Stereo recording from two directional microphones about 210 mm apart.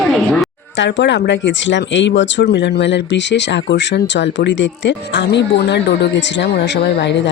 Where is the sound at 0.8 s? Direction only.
55° left (ahead or behind).